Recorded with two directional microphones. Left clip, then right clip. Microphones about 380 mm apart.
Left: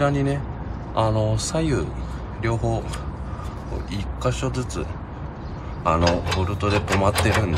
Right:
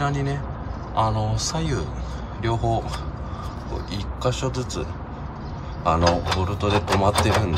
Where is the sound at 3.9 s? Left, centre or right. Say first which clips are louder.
Right 1 dB; centre.